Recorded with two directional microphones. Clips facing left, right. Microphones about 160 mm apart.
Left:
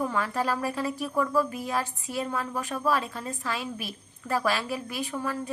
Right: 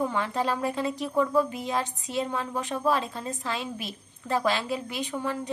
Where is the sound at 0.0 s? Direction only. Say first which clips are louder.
Right 1 dB; 20° right (ahead or behind).